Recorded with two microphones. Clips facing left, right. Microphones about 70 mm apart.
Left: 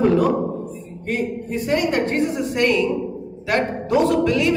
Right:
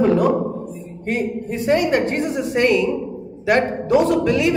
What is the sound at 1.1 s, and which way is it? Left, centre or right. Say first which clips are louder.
A woman's voice: right 1 dB; right.